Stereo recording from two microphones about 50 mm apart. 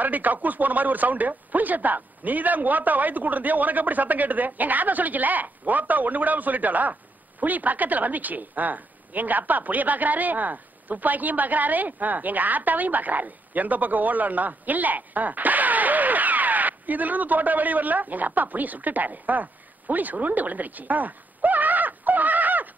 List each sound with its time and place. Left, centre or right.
0.0 s speech: right